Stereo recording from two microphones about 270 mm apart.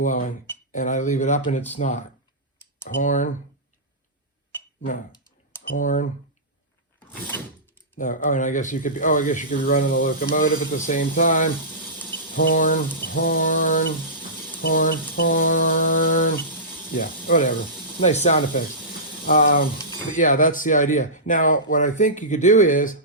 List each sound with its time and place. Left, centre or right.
0.0 s speech: left
5.6 s speech: left
7.9 s speech: left